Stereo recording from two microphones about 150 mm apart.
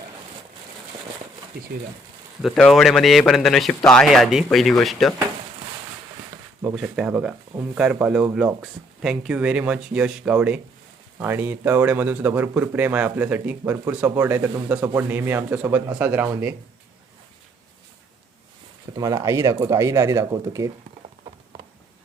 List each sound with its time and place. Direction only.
2.4 s a man's voice: centre (ahead or behind)
6.6 s speech: 15° right (ahead or behind)
18.9 s speech: 25° right (ahead or behind)